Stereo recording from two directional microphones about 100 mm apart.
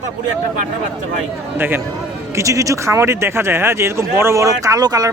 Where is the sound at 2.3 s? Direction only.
30° right (ahead or behind).